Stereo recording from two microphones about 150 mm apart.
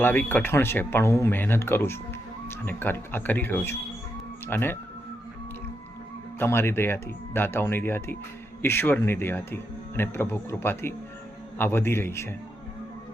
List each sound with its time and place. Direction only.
0.0 s speech: 15° left (ahead or behind)
6.4 s speech: 15° left (ahead or behind)